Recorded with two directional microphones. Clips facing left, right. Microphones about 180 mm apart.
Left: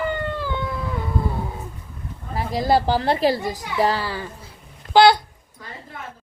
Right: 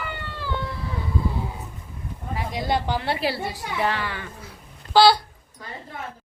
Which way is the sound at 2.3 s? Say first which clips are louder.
Left 6 dB; 40° left (ahead or behind).